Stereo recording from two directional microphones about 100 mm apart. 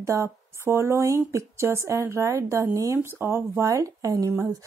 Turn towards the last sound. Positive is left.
turn(degrees=-35)  # may be behind; listen again after turning